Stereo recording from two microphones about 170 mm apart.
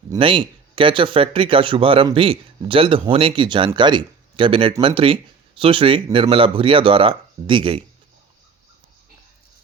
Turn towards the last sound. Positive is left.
turn(degrees=-30)  # may be behind; listen again after turning